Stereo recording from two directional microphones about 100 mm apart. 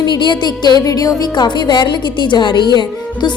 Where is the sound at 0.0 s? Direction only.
50° left (ahead or behind).